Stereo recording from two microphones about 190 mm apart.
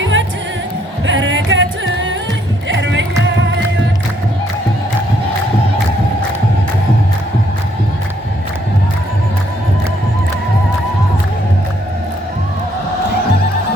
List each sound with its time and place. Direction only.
0.0 s music: 80° right